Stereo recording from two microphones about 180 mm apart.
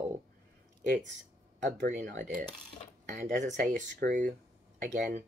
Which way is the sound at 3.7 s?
50° right (ahead or behind).